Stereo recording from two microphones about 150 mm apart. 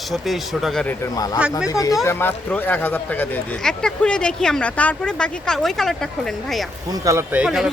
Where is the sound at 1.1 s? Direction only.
25° left (ahead or behind); by 6.1 s centre (ahead or behind).